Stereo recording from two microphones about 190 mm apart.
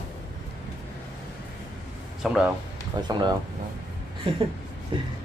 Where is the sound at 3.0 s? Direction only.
20° right (ahead or behind).